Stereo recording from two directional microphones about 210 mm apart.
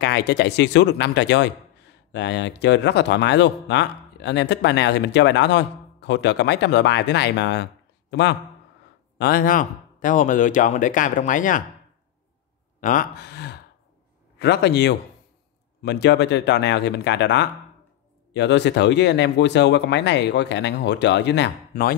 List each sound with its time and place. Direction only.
0.0 s a man's voice: 55° left (ahead or behind)
9.2 s speech: 45° left (ahead or behind)
12.8 s speech: 45° left (ahead or behind)